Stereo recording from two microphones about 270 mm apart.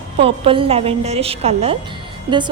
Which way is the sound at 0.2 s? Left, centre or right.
Centre.